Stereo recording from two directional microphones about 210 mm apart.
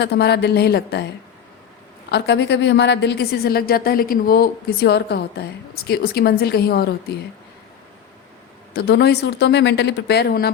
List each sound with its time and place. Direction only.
0.0 s a woman's voice: 50° left (ahead or behind)
2.0 s a woman's voice: 50° left (ahead or behind)
8.7 s a woman's voice: 50° left (ahead or behind)